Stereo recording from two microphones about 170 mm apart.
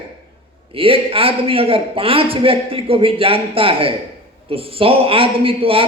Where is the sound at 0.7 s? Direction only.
35° right (ahead or behind).